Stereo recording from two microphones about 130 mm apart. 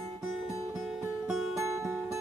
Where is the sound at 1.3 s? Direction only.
Centre (ahead or behind).